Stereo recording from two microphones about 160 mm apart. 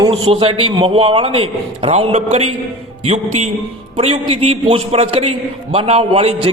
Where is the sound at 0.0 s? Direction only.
30° right (ahead or behind).